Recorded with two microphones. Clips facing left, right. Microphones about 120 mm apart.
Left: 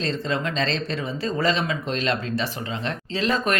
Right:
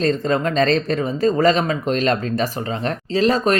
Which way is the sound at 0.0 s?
45° right (ahead or behind).